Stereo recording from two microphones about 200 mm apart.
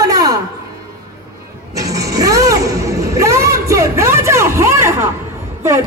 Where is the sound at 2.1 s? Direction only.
15° right (ahead or behind).